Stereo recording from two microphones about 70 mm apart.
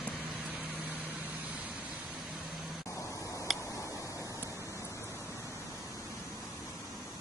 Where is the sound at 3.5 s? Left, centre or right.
Centre.